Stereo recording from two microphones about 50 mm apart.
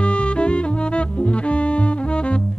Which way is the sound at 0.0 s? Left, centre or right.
Left.